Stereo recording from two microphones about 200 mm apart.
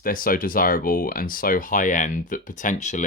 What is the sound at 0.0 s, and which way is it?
Speech, 45° left (ahead or behind).